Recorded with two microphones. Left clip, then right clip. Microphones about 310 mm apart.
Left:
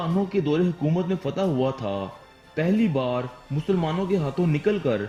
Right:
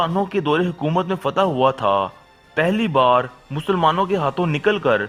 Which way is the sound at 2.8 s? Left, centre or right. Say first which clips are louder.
Right 10 dB; right.